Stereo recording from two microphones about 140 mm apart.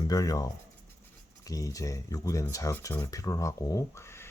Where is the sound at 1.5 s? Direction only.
25° left (ahead or behind).